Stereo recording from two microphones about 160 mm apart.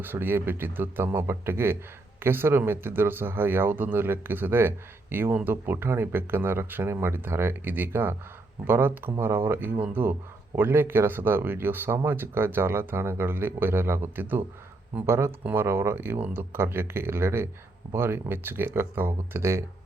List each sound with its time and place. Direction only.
0.0 s speech: 15° right (ahead or behind)